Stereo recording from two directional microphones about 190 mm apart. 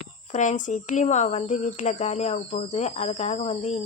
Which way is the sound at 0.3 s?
40° left (ahead or behind).